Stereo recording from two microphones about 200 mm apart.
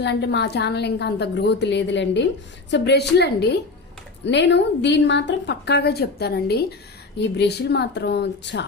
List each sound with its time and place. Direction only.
0.0 s a woman's voice: 55° left (ahead or behind)